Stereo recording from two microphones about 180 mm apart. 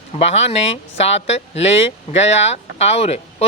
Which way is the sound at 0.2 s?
35° left (ahead or behind).